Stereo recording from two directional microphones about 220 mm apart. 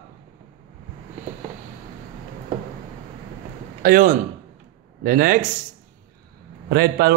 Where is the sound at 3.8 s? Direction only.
40° right (ahead or behind).